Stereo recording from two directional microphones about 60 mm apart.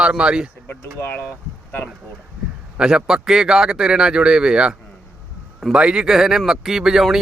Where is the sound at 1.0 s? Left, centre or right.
Left.